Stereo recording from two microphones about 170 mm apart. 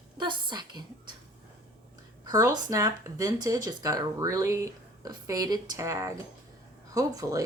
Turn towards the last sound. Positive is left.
turn(degrees=-20)  # may be behind; listen again after turning